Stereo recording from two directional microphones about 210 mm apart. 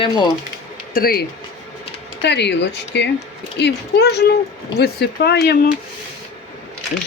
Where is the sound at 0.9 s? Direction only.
45° left (ahead or behind).